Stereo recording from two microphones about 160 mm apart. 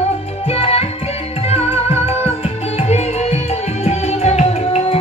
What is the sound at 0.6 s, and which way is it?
Music, 40° left (ahead or behind).